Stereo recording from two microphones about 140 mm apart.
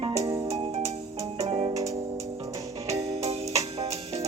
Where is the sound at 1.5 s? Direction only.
40° right (ahead or behind).